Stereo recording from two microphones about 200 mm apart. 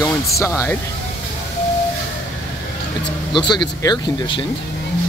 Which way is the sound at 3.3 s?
20° left (ahead or behind).